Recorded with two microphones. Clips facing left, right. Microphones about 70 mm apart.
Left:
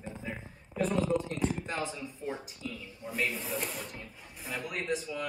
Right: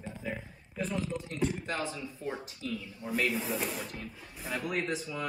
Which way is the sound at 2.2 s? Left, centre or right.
Centre.